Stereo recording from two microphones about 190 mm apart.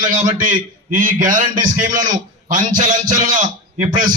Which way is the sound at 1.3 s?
45° right (ahead or behind).